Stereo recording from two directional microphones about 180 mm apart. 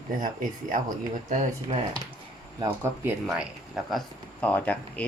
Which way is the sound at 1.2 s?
35° right (ahead or behind).